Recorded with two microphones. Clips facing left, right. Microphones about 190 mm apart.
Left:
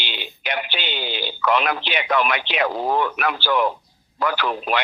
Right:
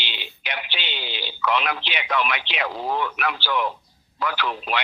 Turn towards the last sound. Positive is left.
turn(degrees=45)  # may be behind; listen again after turning